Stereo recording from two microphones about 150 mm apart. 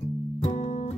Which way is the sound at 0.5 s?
45° left (ahead or behind).